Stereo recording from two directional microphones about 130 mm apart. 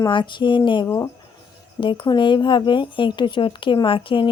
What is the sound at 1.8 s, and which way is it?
Speech, 40° left (ahead or behind).